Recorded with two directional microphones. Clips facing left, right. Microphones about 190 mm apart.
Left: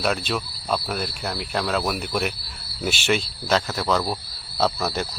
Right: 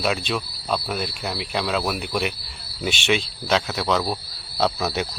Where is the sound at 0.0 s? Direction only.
Centre (ahead or behind).